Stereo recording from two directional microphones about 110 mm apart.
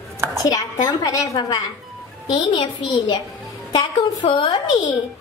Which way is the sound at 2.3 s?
45° left (ahead or behind).